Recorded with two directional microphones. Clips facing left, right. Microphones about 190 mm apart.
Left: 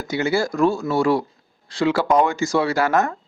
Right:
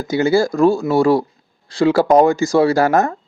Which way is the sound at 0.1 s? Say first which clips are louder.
Right 6 dB; 35° right (ahead or behind).